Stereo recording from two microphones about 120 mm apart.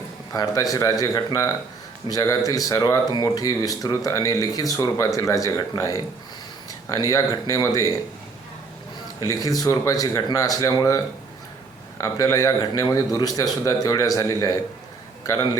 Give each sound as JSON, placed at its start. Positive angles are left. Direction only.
{"t": 0.3, "sound": "speech", "side_deg": 30}
{"t": 9.2, "sound": "a man's voice", "side_deg": 30}